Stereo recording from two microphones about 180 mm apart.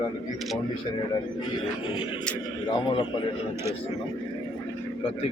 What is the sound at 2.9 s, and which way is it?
Speech, 30° left (ahead or behind).